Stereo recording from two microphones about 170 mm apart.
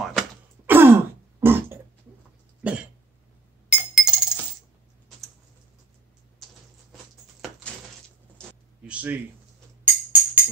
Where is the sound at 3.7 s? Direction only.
5° right (ahead or behind).